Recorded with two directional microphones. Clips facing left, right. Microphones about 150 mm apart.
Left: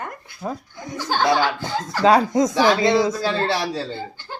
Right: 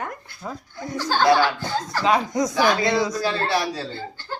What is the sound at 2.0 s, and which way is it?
Speech, 35° left (ahead or behind).